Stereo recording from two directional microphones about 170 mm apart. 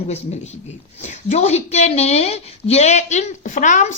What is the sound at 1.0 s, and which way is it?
A woman's voice, 40° left (ahead or behind).